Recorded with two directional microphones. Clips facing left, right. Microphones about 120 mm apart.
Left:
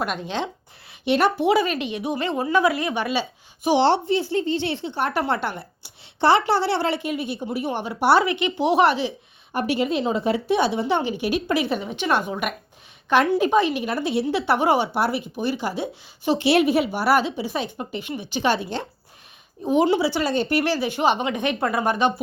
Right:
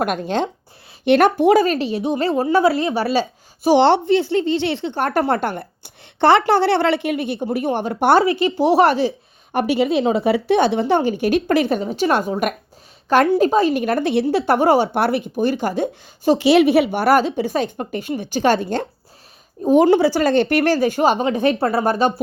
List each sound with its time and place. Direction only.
0.0 s speech: 50° right (ahead or behind)
3.8 s speech: 65° right (ahead or behind)
4.9 s a woman's voice: 45° right (ahead or behind)
8.2 s speech: 35° right (ahead or behind)
9.7 s speech: 75° right (ahead or behind); by 10.8 s 60° right (ahead or behind)
10.8 s speech: 45° right (ahead or behind)
13.4 s speech: 40° right (ahead or behind); by 14.3 s 55° right (ahead or behind)
14.3 s speech: 45° right (ahead or behind)
14.9 s speech: 55° right (ahead or behind)
16.4 s speech: 80° right; by 20.3 s 45° right (ahead or behind)
20.3 s speech: 60° right (ahead or behind); by 22.1 s 35° right (ahead or behind)